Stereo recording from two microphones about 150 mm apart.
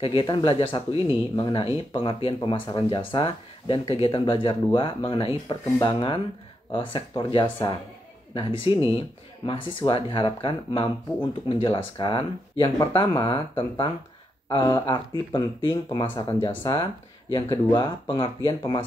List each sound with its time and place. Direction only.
0.0 s speech: 35° left (ahead or behind)